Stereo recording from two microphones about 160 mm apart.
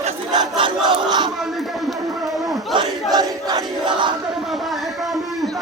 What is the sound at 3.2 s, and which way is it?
Battle cry, 25° right (ahead or behind).